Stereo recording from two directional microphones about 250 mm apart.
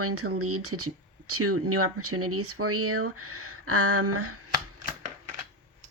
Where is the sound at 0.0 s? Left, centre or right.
Right.